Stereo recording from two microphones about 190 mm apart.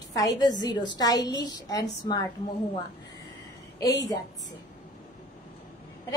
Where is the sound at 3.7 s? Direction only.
20° left (ahead or behind).